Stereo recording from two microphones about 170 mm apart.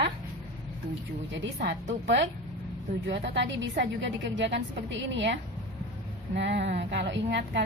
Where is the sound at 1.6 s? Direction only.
90° right.